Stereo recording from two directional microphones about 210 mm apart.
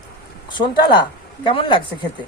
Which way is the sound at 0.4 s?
20° left (ahead or behind).